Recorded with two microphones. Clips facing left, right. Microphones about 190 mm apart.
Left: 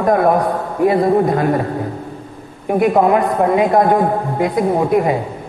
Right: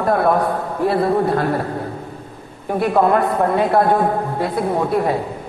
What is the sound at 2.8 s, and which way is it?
A woman's voice, 15° left (ahead or behind).